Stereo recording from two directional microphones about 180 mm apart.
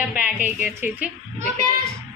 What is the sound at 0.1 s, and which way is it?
Speech, 10° right (ahead or behind).